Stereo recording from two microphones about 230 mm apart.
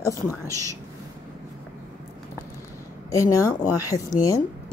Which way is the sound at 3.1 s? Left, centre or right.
Centre.